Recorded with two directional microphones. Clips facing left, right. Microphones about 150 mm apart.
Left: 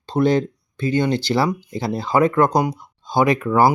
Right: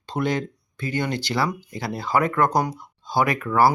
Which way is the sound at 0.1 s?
30° left (ahead or behind).